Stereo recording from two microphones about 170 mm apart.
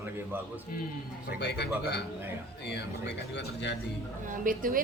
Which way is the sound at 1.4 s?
80° left.